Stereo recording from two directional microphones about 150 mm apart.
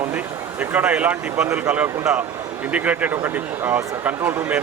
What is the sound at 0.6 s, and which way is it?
Speech, 10° right (ahead or behind).